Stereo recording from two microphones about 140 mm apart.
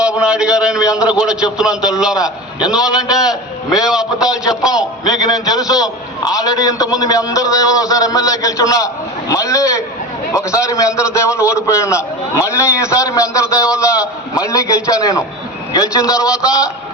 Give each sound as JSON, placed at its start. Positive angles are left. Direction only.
{"t": 0.0, "sound": "a sound", "side_deg": -5}
{"t": 1.2, "sound": "a man's voice", "side_deg": -5}
{"t": 5.0, "sound": "a man's voice", "side_deg": 25}